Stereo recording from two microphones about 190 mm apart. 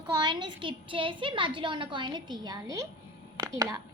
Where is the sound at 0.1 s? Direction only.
25° right (ahead or behind).